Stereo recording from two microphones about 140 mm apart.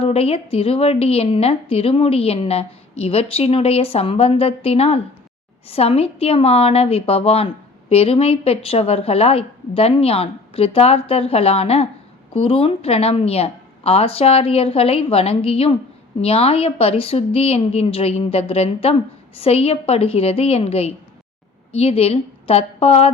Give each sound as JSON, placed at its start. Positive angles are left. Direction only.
{"t": 0.0, "sound": "a woman's voice", "side_deg": 45}